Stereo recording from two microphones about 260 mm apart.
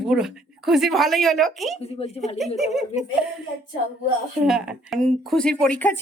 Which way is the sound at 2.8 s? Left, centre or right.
Left.